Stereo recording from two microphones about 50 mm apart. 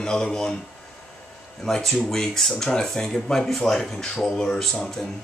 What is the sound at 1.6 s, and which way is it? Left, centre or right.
Speech, centre.